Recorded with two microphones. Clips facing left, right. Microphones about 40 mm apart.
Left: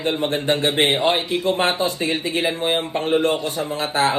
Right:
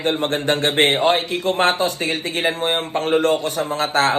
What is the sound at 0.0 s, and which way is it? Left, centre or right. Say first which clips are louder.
Speech: right 1 dB; right.